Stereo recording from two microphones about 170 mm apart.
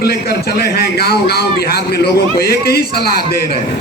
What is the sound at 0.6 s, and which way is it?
A man's voice, 65° left (ahead or behind).